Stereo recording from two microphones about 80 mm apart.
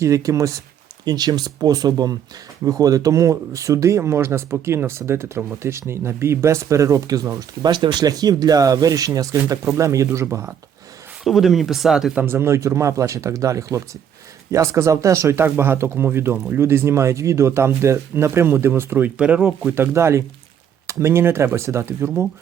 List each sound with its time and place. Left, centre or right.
0.0 s speech: right
1.0 s speech: right
11.2 s speech: centre
12.1 s speech: right
19.1 s speech: centre
19.7 s speech: right